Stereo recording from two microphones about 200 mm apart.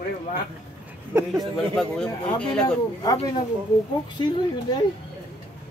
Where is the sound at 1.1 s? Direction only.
10° right (ahead or behind).